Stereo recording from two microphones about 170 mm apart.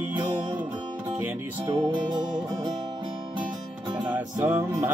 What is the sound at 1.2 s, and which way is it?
Music, 15° right (ahead or behind).